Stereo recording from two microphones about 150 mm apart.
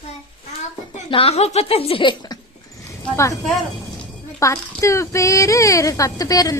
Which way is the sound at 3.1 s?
20° left (ahead or behind).